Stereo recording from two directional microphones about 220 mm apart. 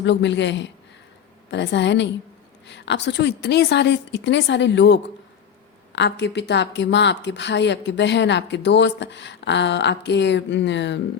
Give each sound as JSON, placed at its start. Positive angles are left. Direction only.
{"t": 0.0, "sound": "speech", "side_deg": 55}